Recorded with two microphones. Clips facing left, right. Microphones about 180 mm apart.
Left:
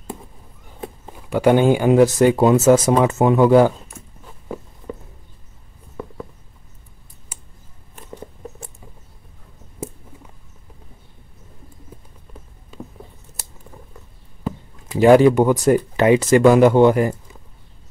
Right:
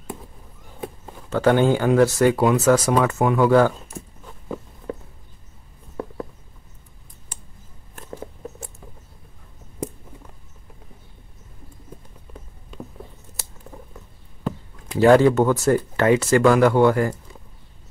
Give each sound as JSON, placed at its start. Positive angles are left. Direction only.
{"t": 1.0, "sound": "speech", "side_deg": 10}
{"t": 7.9, "sound": "rodents", "side_deg": 0}
{"t": 15.0, "sound": "speech", "side_deg": 15}